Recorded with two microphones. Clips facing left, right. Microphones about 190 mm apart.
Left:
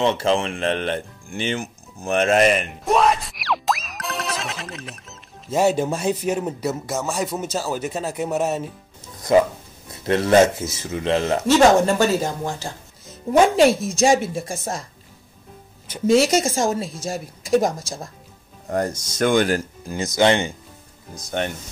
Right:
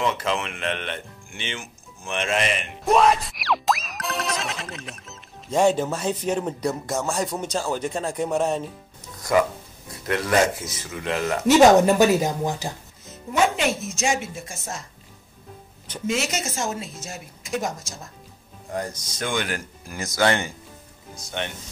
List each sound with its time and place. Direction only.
0.0 s speech: 30° left (ahead or behind)
2.8 s music: centre (ahead or behind)
9.3 s speech: 25° left (ahead or behind)
11.4 s speech: 15° right (ahead or behind)
13.3 s speech: 50° left (ahead or behind)
13.6 s speech: 35° left (ahead or behind)
16.1 s speech: 35° left (ahead or behind)
18.7 s speech: 50° left (ahead or behind)
19.9 s speech: 20° left (ahead or behind)
21.3 s speech: 45° left (ahead or behind)